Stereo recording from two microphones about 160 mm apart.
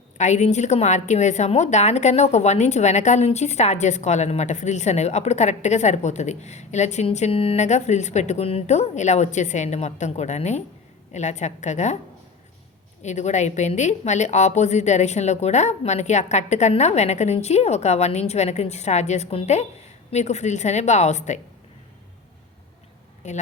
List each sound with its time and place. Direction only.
0.2 s a woman's voice: 45° left (ahead or behind)
13.0 s a woman's voice: 45° left (ahead or behind)
23.2 s a woman's voice: 45° left (ahead or behind)